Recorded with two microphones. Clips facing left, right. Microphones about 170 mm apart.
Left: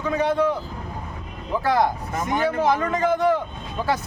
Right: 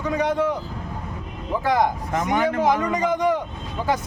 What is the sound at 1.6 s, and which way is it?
A man's voice, 15° right (ahead or behind).